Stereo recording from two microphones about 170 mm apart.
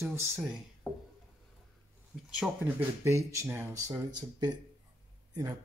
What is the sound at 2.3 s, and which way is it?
Speech, 5° right (ahead or behind).